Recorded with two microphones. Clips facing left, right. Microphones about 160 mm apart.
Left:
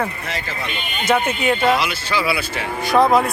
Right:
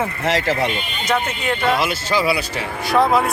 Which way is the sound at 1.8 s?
45° right (ahead or behind).